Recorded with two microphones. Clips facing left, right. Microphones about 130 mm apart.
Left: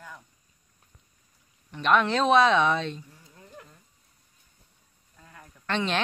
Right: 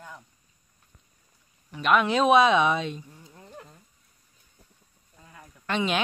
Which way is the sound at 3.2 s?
30° right (ahead or behind).